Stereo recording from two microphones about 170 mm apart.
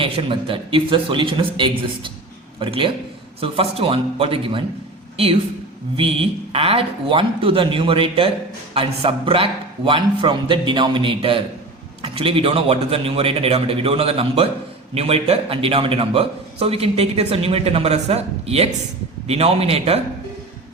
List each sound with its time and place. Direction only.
0.0 s a man's voice: 30° right (ahead or behind)